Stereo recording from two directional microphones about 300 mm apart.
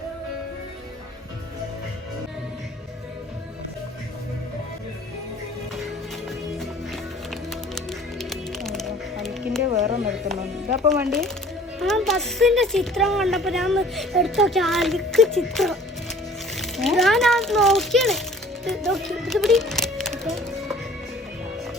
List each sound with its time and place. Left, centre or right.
6.2 s music: centre
10.8 s speech: centre